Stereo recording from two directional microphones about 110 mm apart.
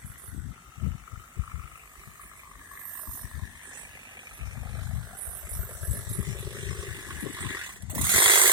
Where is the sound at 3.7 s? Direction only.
40° right (ahead or behind).